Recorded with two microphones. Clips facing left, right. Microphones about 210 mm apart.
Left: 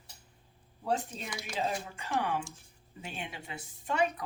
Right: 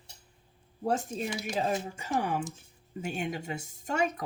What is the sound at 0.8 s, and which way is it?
Speech, 45° right (ahead or behind).